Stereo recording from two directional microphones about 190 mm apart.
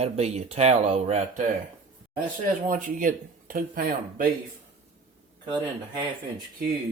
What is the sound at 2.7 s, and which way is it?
Speech, 45° right (ahead or behind).